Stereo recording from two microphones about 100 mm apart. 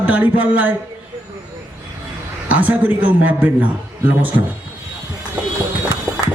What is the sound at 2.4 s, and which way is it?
A man's voice, 15° right (ahead or behind).